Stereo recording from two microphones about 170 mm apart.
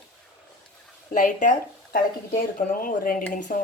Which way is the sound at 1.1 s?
50° left (ahead or behind).